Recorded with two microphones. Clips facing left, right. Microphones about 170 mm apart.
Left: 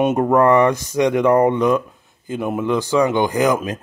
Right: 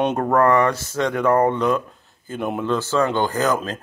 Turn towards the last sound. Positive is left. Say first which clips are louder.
# left 4 dB
turn(degrees=15)  # may be behind; listen again after turning